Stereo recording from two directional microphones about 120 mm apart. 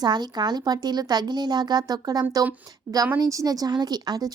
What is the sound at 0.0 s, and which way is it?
A woman's voice, 35° right (ahead or behind).